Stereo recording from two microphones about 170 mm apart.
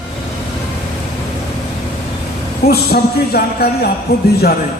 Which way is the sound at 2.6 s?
65° left (ahead or behind).